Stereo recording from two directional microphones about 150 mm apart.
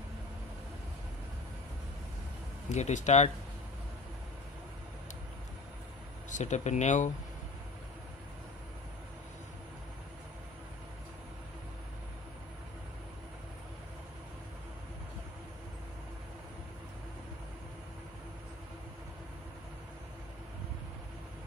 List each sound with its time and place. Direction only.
2.7 s speech: 50° left (ahead or behind)
6.3 s speech: 50° left (ahead or behind)